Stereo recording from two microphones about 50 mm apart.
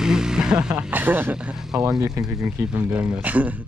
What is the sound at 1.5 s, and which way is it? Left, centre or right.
Speech, centre.